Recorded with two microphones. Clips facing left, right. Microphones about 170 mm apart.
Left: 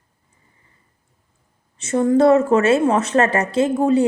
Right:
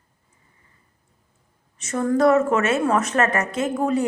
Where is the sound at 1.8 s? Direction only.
25° left (ahead or behind).